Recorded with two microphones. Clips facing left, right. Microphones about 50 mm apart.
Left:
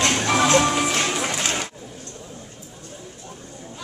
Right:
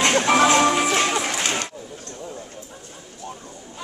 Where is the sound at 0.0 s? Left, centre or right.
Centre.